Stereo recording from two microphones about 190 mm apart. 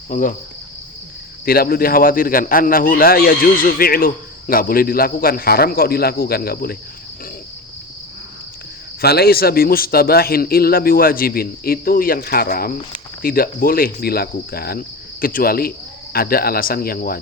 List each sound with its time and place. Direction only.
0.1 s speech: 45° left (ahead or behind)
1.5 s speech: 50° left (ahead or behind)
9.0 s speech: 55° left (ahead or behind)